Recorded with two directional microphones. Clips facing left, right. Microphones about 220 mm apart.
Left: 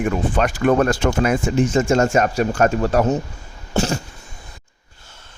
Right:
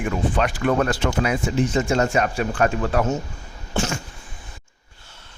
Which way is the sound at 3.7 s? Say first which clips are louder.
Left 4 dB; 40° left (ahead or behind).